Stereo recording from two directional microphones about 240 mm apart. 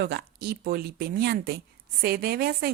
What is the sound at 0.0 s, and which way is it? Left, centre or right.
A woman's voice, right.